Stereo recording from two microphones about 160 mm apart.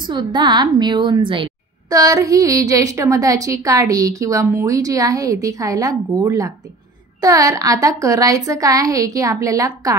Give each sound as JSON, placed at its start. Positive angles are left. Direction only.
{"t": 0.0, "sound": "a woman's voice", "side_deg": -30}